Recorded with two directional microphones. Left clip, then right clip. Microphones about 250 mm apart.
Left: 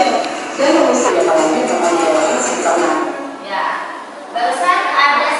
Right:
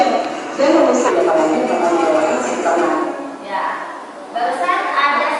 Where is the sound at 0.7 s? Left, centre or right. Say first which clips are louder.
Even; centre.